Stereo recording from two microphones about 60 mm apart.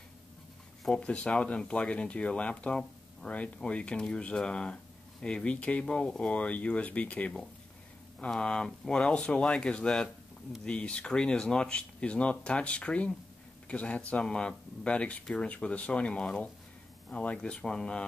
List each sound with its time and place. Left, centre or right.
0.8 s speech: centre